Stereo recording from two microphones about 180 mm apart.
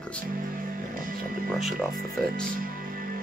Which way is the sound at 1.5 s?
Centre (ahead or behind).